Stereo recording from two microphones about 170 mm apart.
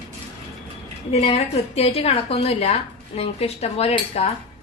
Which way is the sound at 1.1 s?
40° left (ahead or behind).